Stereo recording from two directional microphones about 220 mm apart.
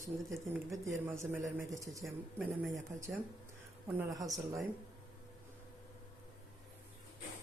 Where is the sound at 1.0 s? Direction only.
10° right (ahead or behind).